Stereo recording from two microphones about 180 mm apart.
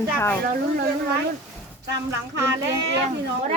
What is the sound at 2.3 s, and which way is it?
Speech, 15° right (ahead or behind).